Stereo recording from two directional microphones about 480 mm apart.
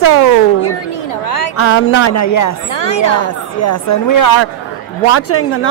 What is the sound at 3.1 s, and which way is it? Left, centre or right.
A woman's voice, left.